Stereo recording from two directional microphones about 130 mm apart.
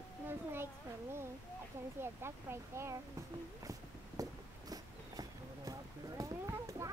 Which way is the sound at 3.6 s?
25° right (ahead or behind).